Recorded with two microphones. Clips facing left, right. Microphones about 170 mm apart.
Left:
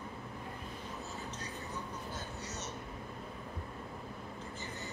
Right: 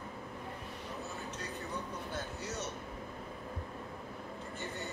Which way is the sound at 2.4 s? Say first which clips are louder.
Right 4 dB; 55° right (ahead or behind).